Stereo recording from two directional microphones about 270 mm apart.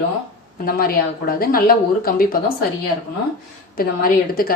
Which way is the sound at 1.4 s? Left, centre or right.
Left.